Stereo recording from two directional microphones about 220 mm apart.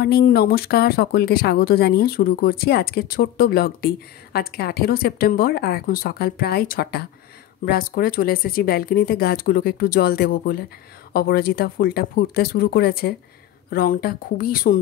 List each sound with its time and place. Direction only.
0.0 s speech: 45° left (ahead or behind)